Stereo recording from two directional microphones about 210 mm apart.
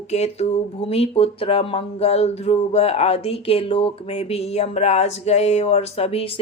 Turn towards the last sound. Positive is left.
turn(degrees=30)  # may be behind; listen again after turning